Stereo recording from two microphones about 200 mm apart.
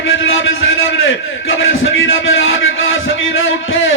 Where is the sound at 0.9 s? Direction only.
80° left.